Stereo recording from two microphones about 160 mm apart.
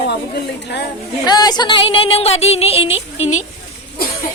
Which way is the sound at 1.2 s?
25° left (ahead or behind).